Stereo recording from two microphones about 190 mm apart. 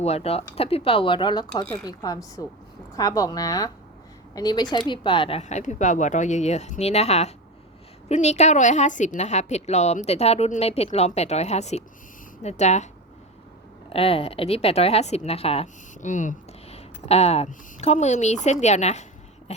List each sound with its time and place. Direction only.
0.0 s speech: 35° left (ahead or behind)
13.9 s speech: 30° left (ahead or behind)